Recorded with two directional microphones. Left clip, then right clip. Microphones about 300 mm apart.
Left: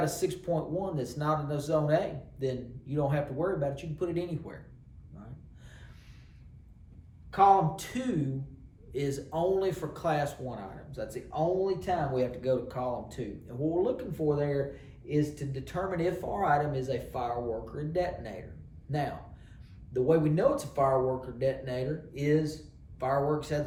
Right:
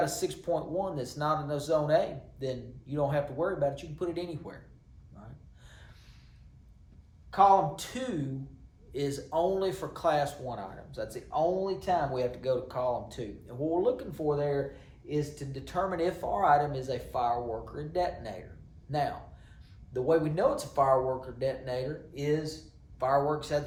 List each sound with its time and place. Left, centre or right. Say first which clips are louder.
0.0 s speech: even; centre
7.3 s speech: even; centre
19.9 s speech: left 1 dB; centre